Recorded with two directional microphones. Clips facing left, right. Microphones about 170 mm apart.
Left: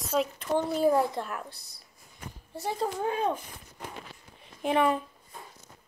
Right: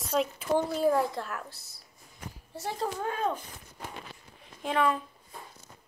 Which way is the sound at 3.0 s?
15° left (ahead or behind).